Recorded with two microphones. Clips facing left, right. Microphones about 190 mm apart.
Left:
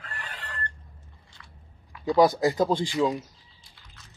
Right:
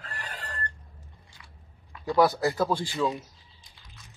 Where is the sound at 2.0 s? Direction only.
15° left (ahead or behind).